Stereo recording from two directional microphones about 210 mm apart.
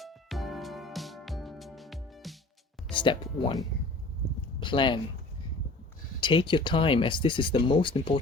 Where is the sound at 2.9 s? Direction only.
20° left (ahead or behind).